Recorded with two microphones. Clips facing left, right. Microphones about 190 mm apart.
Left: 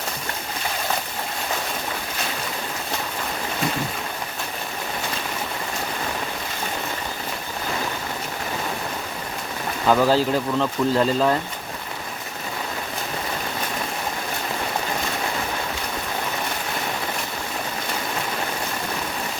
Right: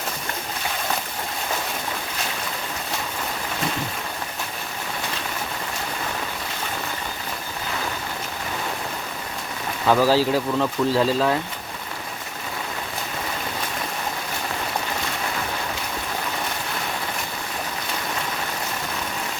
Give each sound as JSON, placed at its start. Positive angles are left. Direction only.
{"t": 9.8, "sound": "speech", "side_deg": -5}